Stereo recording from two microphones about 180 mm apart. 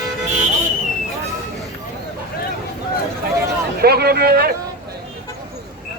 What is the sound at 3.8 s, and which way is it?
Speech, 60° right (ahead or behind).